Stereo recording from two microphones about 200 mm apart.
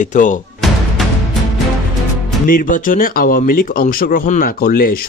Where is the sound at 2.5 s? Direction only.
45° left (ahead or behind).